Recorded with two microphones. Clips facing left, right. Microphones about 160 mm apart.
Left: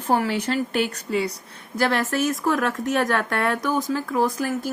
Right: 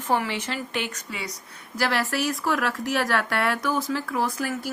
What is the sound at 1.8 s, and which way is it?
Speech, 50° left (ahead or behind).